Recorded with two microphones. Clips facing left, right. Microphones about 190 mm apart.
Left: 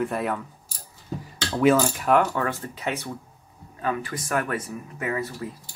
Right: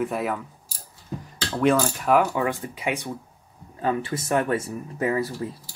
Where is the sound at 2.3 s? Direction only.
15° right (ahead or behind).